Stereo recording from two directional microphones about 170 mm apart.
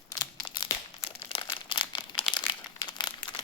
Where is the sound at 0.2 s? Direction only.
25° left (ahead or behind).